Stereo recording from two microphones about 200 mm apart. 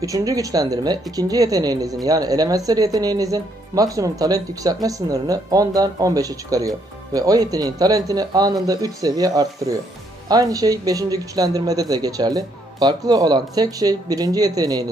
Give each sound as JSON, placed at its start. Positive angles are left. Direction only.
{"t": 0.0, "sound": "speech", "side_deg": -15}